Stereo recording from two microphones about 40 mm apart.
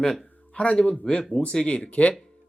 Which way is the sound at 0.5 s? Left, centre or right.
Left.